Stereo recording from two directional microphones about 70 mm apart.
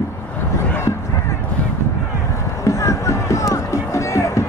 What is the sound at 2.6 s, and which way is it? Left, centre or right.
Music, left.